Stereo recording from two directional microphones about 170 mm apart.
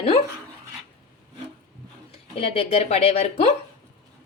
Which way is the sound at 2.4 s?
35° left (ahead or behind).